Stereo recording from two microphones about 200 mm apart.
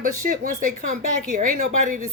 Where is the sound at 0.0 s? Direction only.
40° right (ahead or behind).